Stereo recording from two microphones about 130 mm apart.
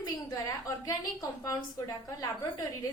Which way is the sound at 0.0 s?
30° left (ahead or behind).